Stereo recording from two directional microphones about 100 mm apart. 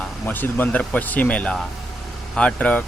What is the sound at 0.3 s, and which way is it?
Speech, 20° left (ahead or behind).